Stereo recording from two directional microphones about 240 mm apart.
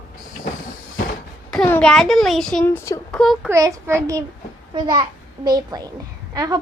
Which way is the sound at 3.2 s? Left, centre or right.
Centre.